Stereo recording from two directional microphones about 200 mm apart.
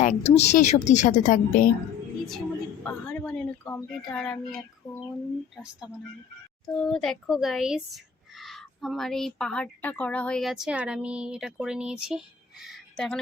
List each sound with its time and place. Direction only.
0.0 s a woman's voice: 35° left (ahead or behind)
2.8 s speech: 5° left (ahead or behind)
6.7 s speech: 5° left (ahead or behind)